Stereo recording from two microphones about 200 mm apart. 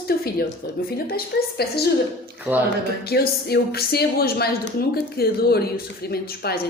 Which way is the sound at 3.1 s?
50° left (ahead or behind).